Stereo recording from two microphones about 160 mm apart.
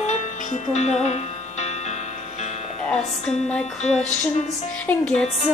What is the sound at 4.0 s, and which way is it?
Music, 45° left (ahead or behind).